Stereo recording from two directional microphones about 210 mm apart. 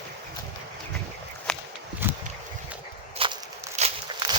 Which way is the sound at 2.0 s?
10° right (ahead or behind).